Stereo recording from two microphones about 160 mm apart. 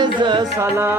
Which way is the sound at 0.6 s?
15° right (ahead or behind).